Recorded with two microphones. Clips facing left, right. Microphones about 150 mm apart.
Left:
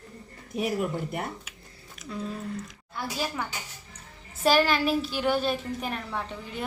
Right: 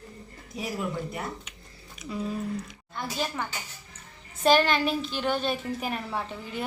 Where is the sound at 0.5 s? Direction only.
60° left (ahead or behind).